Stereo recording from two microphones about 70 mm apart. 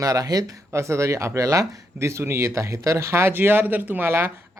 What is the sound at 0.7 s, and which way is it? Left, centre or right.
Speech, right.